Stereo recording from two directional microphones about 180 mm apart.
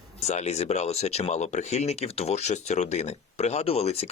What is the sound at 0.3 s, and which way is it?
Speech, 40° left (ahead or behind).